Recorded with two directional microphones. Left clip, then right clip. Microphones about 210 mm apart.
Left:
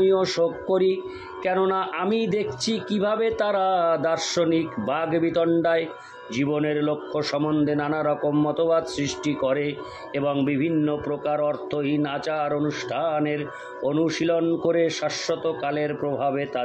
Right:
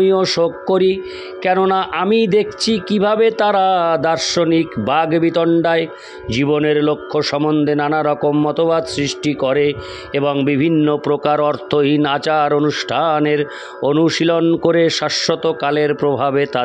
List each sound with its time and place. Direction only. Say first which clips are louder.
0.0 s a man's voice: right 6 dB; 40° right (ahead or behind)